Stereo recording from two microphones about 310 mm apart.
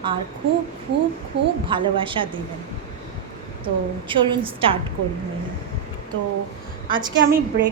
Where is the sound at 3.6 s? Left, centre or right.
Centre.